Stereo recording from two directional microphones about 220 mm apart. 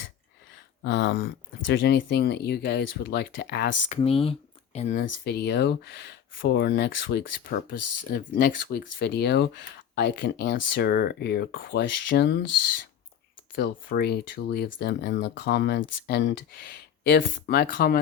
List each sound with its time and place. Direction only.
0.9 s speech: 55° left (ahead or behind)
3.8 s speech: 30° left (ahead or behind)
5.2 s speech: 50° left (ahead or behind)
13.6 s speech: 50° left (ahead or behind)